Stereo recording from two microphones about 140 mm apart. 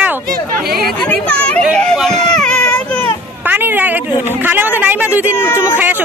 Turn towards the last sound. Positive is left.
turn(degrees=15)  # may be behind; listen again after turning